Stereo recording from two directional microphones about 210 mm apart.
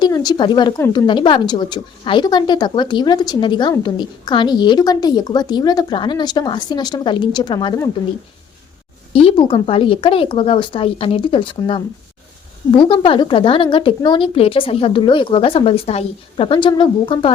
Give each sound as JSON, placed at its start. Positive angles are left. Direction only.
{"t": 0.0, "sound": "a woman's voice", "side_deg": 20}
{"t": 9.1, "sound": "a woman's voice", "side_deg": 25}